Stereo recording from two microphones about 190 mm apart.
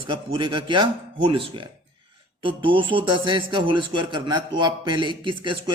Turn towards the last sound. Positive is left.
turn(degrees=-25)  # may be behind; listen again after turning